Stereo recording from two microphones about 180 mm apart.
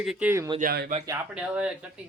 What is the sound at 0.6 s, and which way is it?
Speech, 55° right (ahead or behind).